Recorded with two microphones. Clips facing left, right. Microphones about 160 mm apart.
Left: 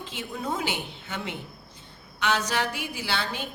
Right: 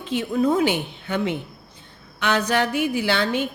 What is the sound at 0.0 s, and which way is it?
A woman's voice, 60° right (ahead or behind).